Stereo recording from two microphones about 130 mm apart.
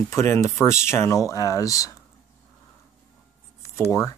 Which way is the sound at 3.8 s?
20° left (ahead or behind).